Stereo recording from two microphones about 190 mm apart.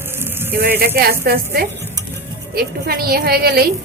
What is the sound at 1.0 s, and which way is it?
A woman's voice, 55° right (ahead or behind).